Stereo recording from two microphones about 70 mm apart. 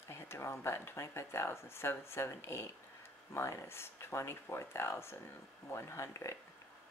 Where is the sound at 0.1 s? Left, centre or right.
Left.